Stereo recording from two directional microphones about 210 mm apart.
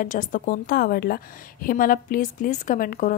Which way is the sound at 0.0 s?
40° left (ahead or behind).